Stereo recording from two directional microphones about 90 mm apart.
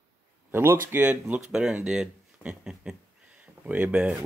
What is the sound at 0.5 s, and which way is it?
Speech, 25° right (ahead or behind).